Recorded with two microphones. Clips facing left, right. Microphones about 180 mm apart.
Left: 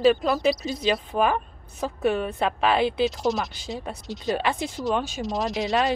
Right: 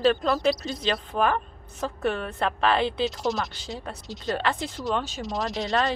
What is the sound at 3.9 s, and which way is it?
A woman's voice, 15° left (ahead or behind).